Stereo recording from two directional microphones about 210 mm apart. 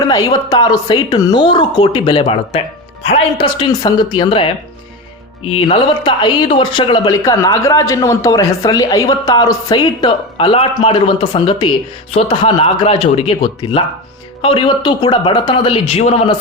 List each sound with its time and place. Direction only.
0.1 s speech: 15° left (ahead or behind)